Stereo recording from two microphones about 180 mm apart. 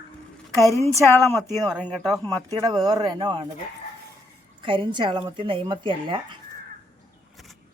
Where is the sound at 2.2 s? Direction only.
20° right (ahead or behind).